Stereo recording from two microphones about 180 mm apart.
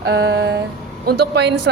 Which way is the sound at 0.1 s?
70° right (ahead or behind).